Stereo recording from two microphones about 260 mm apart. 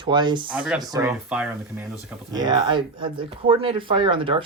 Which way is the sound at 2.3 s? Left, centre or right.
Centre.